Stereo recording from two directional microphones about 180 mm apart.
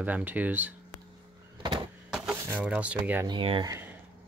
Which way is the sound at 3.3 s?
30° right (ahead or behind).